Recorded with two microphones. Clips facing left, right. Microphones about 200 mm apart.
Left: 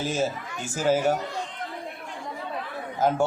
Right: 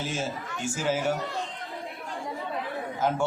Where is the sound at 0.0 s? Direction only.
40° left (ahead or behind).